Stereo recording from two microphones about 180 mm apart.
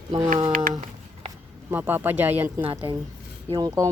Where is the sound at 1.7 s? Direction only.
10° right (ahead or behind).